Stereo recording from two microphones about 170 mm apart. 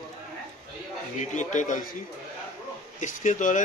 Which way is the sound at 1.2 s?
45° left (ahead or behind).